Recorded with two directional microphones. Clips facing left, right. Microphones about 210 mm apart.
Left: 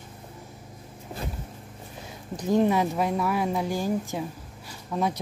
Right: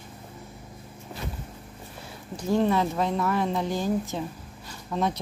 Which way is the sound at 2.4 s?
15° left (ahead or behind).